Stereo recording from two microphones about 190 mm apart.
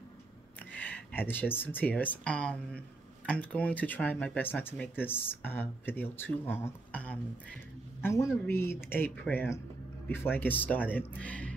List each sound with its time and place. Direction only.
0.7 s a man's voice: 10° left (ahead or behind)